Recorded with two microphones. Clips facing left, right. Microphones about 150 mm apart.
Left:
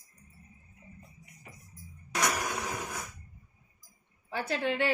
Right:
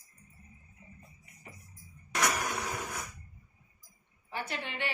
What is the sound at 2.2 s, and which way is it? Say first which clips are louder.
Vehicle: even; 10° left (ahead or behind).